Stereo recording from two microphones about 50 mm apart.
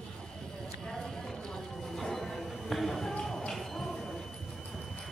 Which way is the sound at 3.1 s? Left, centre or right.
Centre.